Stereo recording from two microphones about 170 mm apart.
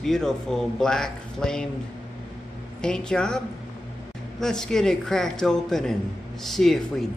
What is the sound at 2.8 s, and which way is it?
Speech, 5° left (ahead or behind).